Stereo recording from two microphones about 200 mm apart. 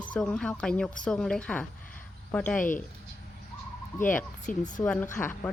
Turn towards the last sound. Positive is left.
turn(degrees=10)  # may be behind; listen again after turning